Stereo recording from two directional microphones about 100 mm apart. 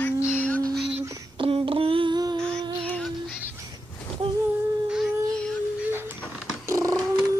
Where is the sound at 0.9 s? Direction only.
65° right (ahead or behind).